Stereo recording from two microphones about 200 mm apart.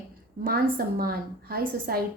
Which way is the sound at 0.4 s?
50° right (ahead or behind).